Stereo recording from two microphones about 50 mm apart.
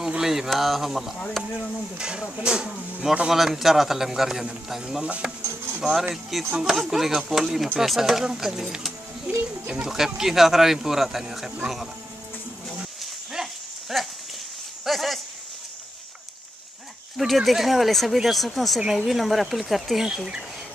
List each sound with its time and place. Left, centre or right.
0.2 s speech: centre
2.0 s speech: centre
3.3 s speech: centre
9.3 s a child's voice: right
9.7 s speech: centre
13.0 s a sound: centre
14.9 s speech: centre
17.2 s speech: centre